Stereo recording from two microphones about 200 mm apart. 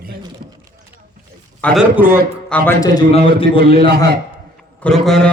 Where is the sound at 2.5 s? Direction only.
5° left (ahead or behind).